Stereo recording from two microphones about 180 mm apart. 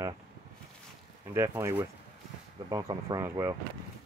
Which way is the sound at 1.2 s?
15° right (ahead or behind).